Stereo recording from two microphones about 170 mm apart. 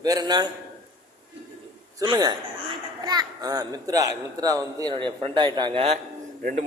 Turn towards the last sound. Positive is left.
turn(degrees=-55)  # may be behind; listen again after turning